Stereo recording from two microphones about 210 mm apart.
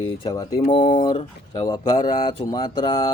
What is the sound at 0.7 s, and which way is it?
Speech, 25° left (ahead or behind).